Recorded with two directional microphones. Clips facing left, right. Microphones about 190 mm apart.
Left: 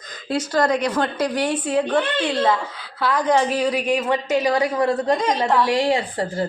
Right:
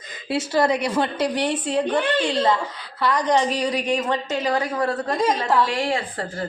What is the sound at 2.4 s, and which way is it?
A woman's voice, 5° left (ahead or behind).